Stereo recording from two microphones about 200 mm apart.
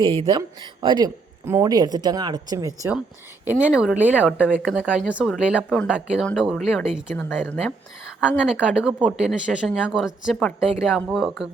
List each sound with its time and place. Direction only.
0.0 s speech: 25° right (ahead or behind)
3.4 s speech: 5° right (ahead or behind)
8.2 s speech: 5° right (ahead or behind)